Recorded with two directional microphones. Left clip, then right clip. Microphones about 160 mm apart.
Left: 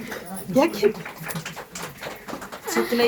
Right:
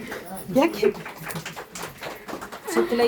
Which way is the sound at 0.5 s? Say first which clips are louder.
Left 1 dB; 30° right (ahead or behind).